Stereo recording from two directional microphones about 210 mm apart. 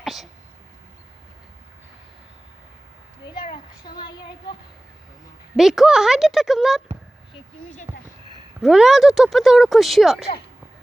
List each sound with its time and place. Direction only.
0.0 s speech: centre (ahead or behind)
3.2 s a woman's voice: 20° left (ahead or behind)
5.5 s speech: centre (ahead or behind)
8.6 s speech: centre (ahead or behind)